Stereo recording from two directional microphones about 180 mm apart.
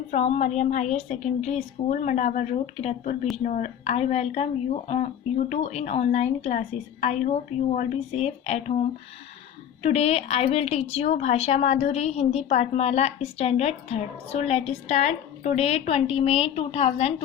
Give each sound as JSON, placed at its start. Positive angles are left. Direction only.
{"t": 0.1, "sound": "a woman's voice", "side_deg": 40}
{"t": 9.8, "sound": "a woman's voice", "side_deg": 35}